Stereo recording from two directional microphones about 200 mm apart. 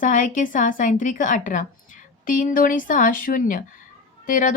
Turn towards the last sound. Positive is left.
turn(degrees=40)  # may be behind; listen again after turning